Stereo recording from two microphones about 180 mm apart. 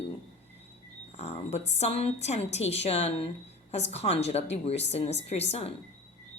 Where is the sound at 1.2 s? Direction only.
35° left (ahead or behind).